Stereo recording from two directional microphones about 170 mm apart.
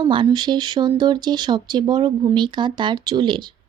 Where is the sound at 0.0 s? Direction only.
25° right (ahead or behind).